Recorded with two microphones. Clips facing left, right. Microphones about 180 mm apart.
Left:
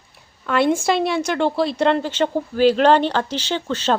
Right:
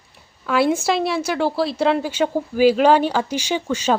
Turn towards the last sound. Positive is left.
turn(degrees=-10)  # may be behind; listen again after turning